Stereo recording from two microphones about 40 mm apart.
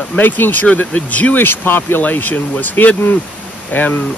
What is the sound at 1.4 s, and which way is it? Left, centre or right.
Speech, left.